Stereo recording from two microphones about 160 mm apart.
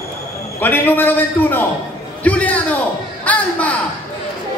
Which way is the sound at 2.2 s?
10° left (ahead or behind).